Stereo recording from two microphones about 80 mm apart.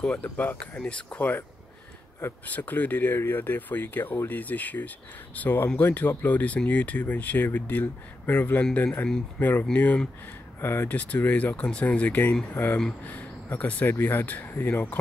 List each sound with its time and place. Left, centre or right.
0.2 s speech: left
2.4 s speech: left
9.4 s speech: left
10.6 s speech: left